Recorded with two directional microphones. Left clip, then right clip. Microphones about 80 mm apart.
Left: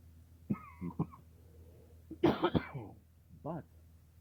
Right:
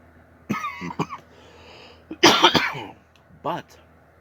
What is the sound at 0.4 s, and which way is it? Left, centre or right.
Cough, centre.